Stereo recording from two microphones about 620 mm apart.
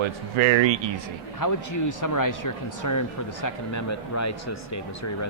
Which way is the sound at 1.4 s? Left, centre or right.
Left.